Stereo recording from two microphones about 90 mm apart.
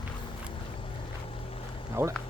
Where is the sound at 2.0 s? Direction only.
30° right (ahead or behind).